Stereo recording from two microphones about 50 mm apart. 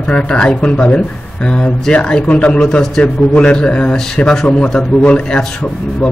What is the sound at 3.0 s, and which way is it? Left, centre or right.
A man's voice, left.